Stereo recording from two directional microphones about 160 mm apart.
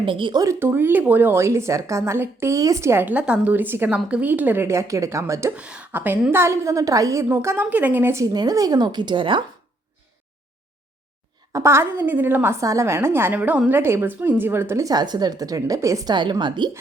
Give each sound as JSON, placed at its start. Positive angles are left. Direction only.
{"t": 0.0, "sound": "speech", "side_deg": -30}
{"t": 5.5, "sound": "speech", "side_deg": -5}
{"t": 11.5, "sound": "speech", "side_deg": -15}